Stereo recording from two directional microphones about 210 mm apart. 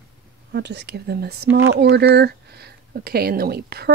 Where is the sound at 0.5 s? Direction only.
55° right (ahead or behind).